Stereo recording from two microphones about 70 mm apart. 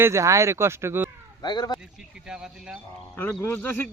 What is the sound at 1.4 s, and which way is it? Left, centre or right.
Speech, left.